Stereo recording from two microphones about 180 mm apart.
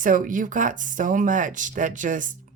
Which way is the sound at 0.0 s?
45° right (ahead or behind).